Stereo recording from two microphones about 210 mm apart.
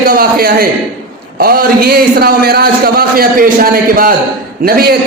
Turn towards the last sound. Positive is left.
turn(degrees=-45)  # may be behind; listen again after turning